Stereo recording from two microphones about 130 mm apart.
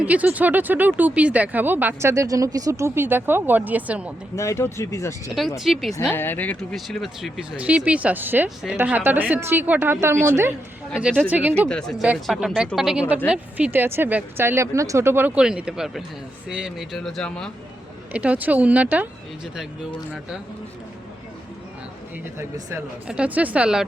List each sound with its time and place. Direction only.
0.0 s speech: 10° right (ahead or behind)
4.4 s speech: 20° left (ahead or behind)
5.5 s speech: centre (ahead or behind)
6.1 s speech: 15° left (ahead or behind)
6.7 s speech: centre (ahead or behind); by 10.5 s 20° right (ahead or behind)
10.9 s speech: 10° right (ahead or behind)
11.7 s speech: 5° left (ahead or behind); by 15.3 s 20° right (ahead or behind)
15.4 s speech: 5° right (ahead or behind)
18.1 s speech: 10° right (ahead or behind)
22.4 s speech: 20° right (ahead or behind)
23.0 s speech: 10° right (ahead or behind)